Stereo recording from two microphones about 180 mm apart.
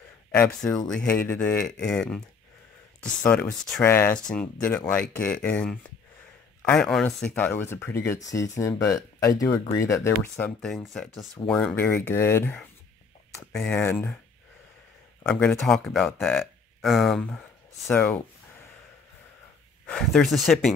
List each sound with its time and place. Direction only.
0.3 s speech: 10° left (ahead or behind)
3.3 s speech: 5° left (ahead or behind)
15.2 s speech: 5° left (ahead or behind)
17.8 s speech: 10° left (ahead or behind)
19.9 s speech: 5° left (ahead or behind)